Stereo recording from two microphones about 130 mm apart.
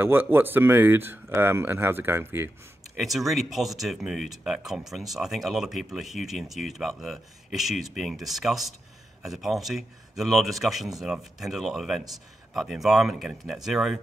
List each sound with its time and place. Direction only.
0.0 s speech: 15° right (ahead or behind)
3.0 s speech: centre (ahead or behind)